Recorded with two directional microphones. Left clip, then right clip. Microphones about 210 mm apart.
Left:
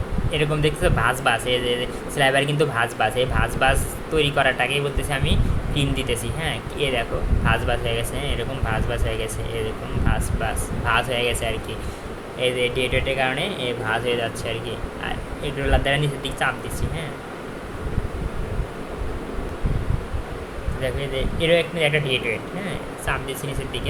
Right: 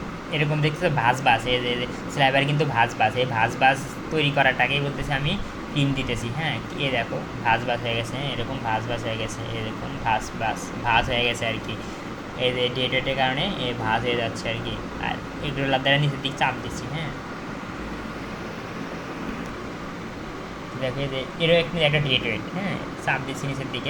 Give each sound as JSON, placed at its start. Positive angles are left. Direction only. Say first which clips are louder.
{"t": 0.3, "sound": "speech", "louder": "left 3 dB", "side_deg": 15}
{"t": 20.8, "sound": "speech", "louder": "left 2 dB", "side_deg": 10}